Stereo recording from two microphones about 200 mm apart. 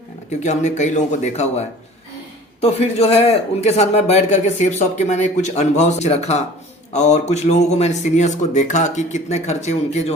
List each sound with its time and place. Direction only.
0.3 s a man's voice: 35° left (ahead or behind)